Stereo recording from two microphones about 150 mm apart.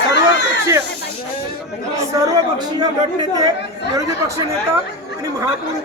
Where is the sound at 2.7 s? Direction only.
25° right (ahead or behind).